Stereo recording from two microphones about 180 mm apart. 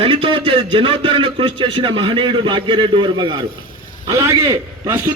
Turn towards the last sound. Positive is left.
turn(degrees=-15)  # may be behind; listen again after turning